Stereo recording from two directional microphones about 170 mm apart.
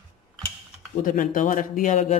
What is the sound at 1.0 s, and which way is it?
Speech, 55° left (ahead or behind).